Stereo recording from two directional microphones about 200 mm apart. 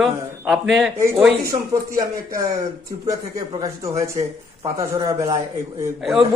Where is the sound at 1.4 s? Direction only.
15° right (ahead or behind).